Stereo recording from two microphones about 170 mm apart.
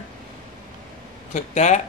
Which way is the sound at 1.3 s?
45° left (ahead or behind).